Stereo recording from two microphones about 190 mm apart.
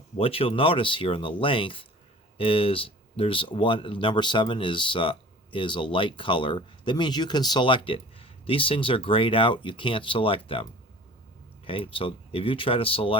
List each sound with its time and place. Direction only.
0.2 s speech: 30° left (ahead or behind)